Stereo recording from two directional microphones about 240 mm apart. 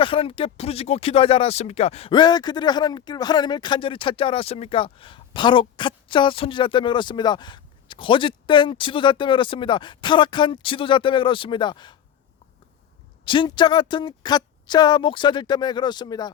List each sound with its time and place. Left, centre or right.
0.0 s speech: left
13.2 s a woman's voice: centre